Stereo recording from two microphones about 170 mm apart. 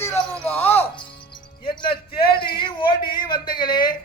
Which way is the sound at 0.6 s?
10° left (ahead or behind).